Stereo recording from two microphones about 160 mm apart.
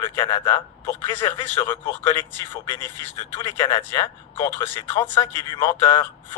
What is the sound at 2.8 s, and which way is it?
Speech, 15° left (ahead or behind).